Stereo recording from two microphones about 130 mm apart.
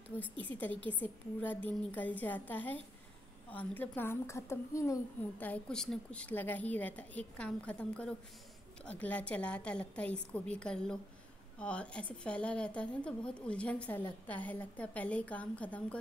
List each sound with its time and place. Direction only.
0.2 s a woman's voice: 10° left (ahead or behind)
5.4 s a woman's voice: 10° left (ahead or behind)